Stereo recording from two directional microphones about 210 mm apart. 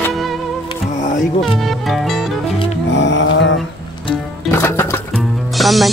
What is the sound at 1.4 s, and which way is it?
Music, centre (ahead or behind).